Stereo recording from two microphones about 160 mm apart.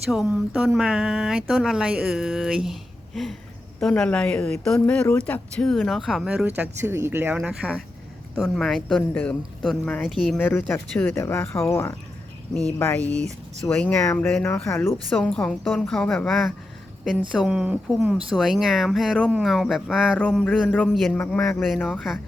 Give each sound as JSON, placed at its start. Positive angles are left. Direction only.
{"t": 0.1, "sound": "speech", "side_deg": 0}
{"t": 3.8, "sound": "speech", "side_deg": 5}
{"t": 6.6, "sound": "speech", "side_deg": -15}
{"t": 10.3, "sound": "speech", "side_deg": 10}
{"t": 13.1, "sound": "speech", "side_deg": 5}
{"t": 15.1, "sound": "speech", "side_deg": 5}
{"t": 20.1, "sound": "speech", "side_deg": 5}
{"t": 21.6, "sound": "speech", "side_deg": 0}